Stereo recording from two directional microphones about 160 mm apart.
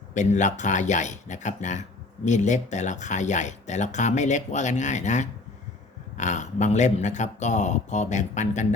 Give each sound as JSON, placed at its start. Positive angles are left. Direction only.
{"t": 0.1, "sound": "speech", "side_deg": 50}